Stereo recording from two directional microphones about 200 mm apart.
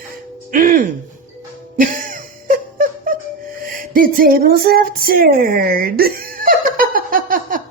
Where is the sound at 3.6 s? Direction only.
45° right (ahead or behind).